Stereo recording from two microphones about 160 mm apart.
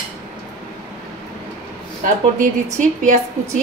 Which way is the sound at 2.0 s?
50° right (ahead or behind).